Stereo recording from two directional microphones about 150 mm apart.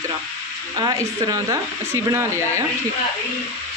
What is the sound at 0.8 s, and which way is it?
Speech, 25° right (ahead or behind).